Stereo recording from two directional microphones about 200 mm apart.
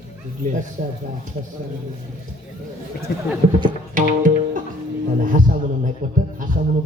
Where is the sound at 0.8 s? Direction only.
45° right (ahead or behind).